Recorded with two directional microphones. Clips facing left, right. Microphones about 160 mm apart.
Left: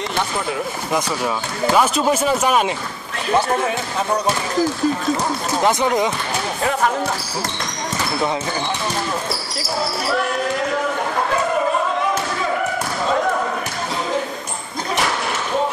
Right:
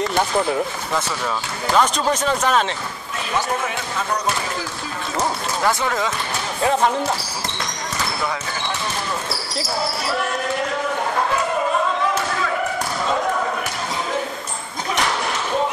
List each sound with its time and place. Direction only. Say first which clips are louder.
0.9 s speech: left 3 dB; 10° left (ahead or behind)
5.6 s speech: left 4 dB; 20° left (ahead or behind)